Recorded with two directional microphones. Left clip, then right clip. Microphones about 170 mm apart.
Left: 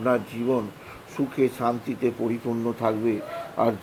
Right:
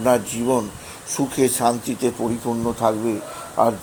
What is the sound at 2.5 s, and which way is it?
Speech, 10° right (ahead or behind).